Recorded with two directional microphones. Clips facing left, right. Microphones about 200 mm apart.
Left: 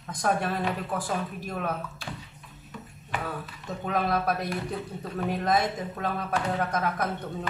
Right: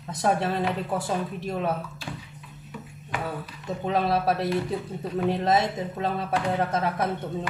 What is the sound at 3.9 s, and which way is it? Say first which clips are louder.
Speech: right 3 dB; 30° right (ahead or behind).